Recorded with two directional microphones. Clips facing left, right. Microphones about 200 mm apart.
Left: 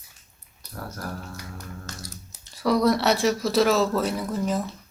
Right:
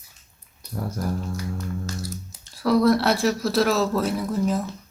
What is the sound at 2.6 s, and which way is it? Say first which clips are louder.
Speech: right 2 dB; centre (ahead or behind).